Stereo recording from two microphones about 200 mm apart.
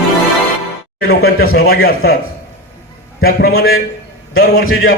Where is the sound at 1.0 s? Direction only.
90° left.